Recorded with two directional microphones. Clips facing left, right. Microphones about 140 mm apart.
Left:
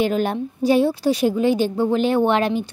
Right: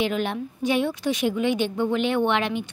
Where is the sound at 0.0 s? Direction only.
40° left (ahead or behind).